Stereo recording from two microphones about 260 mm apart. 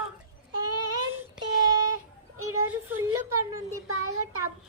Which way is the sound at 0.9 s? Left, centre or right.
Centre.